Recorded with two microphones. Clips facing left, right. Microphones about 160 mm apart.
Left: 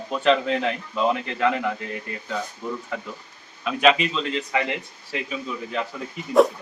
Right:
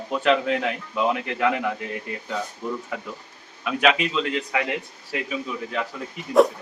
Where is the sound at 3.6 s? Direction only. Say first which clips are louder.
Left 2 dB; 5° right (ahead or behind).